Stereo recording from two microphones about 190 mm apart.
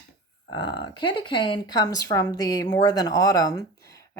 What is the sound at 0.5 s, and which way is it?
Speech, 25° left (ahead or behind).